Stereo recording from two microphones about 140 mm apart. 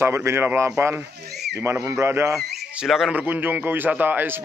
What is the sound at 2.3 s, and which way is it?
A man's voice, centre (ahead or behind).